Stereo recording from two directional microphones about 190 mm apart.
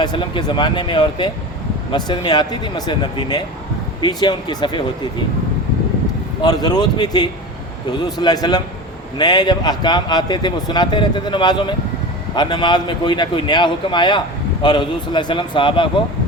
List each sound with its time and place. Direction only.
0.0 s a man's voice: 25° left (ahead or behind)
6.4 s a man's voice: 20° left (ahead or behind)